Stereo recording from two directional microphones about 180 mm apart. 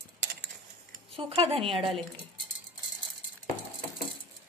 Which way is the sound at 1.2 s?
30° right (ahead or behind).